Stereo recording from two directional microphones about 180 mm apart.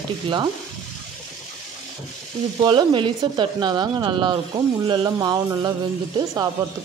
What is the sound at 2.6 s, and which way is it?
Speech, 25° right (ahead or behind).